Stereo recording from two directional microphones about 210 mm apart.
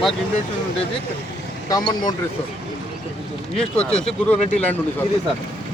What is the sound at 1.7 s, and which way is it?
Speech, 20° left (ahead or behind).